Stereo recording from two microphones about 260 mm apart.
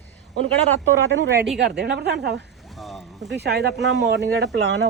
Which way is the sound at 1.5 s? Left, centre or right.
Centre.